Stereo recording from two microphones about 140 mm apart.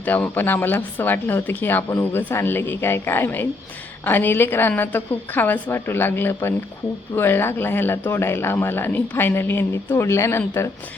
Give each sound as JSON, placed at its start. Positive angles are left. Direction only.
{"t": 0.0, "sound": "speech", "side_deg": 10}